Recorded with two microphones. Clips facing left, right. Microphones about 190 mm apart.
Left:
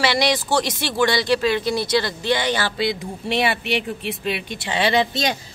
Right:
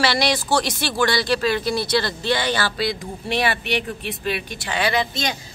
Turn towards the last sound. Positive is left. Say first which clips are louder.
# left 3 dB
turn(degrees=35)  # may be behind; listen again after turning